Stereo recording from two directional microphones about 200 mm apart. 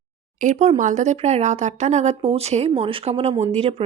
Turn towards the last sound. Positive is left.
turn(degrees=-35)  # may be behind; listen again after turning